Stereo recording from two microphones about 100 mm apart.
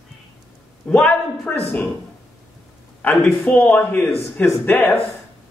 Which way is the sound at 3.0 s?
20° left (ahead or behind).